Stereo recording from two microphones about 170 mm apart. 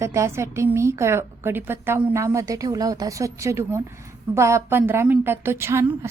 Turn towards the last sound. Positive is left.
turn(degrees=-15)  # may be behind; listen again after turning